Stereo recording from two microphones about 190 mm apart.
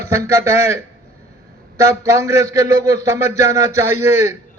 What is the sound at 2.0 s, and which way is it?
Speech, 15° right (ahead or behind).